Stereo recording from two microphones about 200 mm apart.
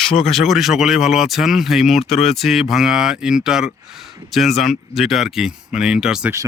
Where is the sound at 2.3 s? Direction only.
Centre (ahead or behind).